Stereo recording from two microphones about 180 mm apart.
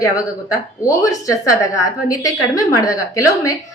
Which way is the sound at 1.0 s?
20° left (ahead or behind).